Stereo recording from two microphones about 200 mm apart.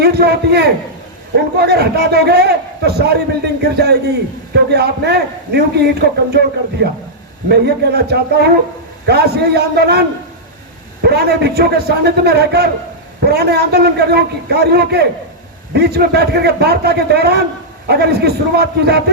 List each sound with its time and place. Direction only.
0.0 s a man's voice: 55° right (ahead or behind)
7.4 s a man's voice: 55° right (ahead or behind)